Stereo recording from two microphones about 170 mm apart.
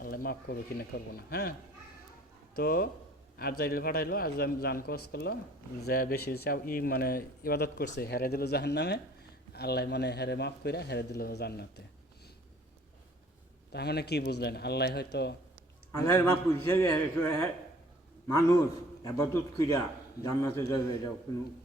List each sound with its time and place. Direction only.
0.0 s speech: 60° left (ahead or behind)
2.6 s speech: 60° left (ahead or behind)
13.7 s speech: 75° left (ahead or behind)
15.9 s a man's voice: 20° left (ahead or behind)